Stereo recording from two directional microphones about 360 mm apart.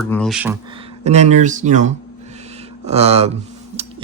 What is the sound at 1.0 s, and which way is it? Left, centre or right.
Speech, centre.